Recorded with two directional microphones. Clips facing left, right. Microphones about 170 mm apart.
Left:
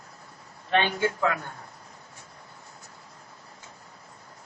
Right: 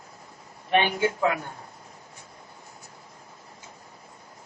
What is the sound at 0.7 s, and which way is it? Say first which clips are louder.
Speech: right 2 dB; 15° right (ahead or behind).